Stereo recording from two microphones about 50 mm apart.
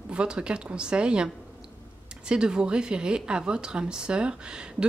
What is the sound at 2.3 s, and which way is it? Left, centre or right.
Speech, centre.